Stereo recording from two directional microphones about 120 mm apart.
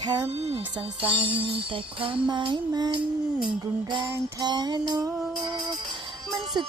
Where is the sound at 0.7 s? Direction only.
50° right (ahead or behind).